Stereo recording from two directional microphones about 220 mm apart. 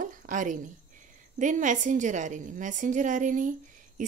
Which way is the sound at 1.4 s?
35° right (ahead or behind).